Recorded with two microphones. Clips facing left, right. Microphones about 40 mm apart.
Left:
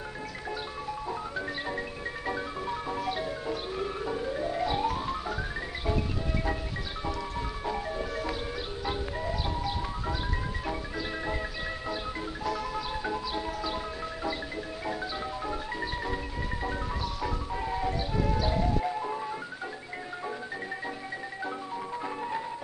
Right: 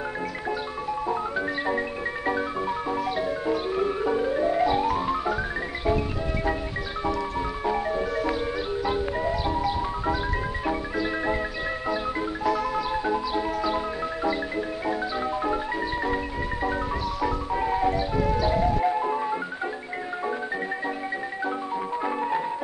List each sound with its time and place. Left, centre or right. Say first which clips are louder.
2.9 s music: right 5 dB; centre
3.4 s music: right 8 dB; centre
4.6 s music: right 6 dB; centre
7.6 s music: right 8 dB; centre
8.0 s music: right 7 dB; centre
12.4 s music: right 7 dB; centre
17.5 s music: right 7 dB; right
17.8 s music: right 6 dB; centre
18.8 s music: right 7 dB; right
22.0 s music: right 8 dB; right